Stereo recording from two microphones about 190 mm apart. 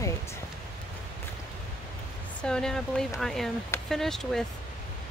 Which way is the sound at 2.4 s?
5° left (ahead or behind).